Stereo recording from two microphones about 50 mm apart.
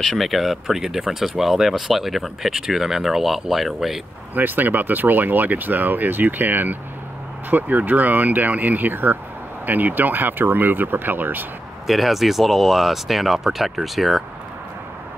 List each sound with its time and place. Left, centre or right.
0.1 s speech: centre
4.4 s speech: right
11.9 s speech: centre